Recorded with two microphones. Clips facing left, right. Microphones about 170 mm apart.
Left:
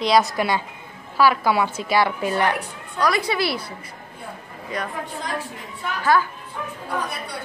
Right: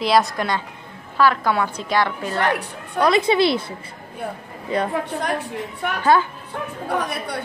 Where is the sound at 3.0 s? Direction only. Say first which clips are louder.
Right 5 dB; 25° right (ahead or behind).